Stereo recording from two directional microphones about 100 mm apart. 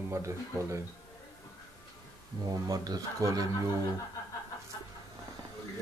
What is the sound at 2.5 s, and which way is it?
Speech, 40° right (ahead or behind).